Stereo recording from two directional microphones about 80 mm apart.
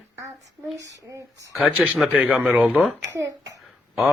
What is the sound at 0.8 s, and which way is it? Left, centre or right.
Speech, right.